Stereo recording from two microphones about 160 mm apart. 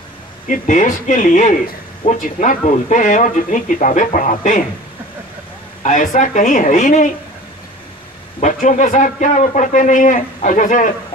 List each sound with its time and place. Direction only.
0.5 s a man's voice: 50° left (ahead or behind)
5.9 s a man's voice: 55° left (ahead or behind)
8.4 s a man's voice: 50° left (ahead or behind)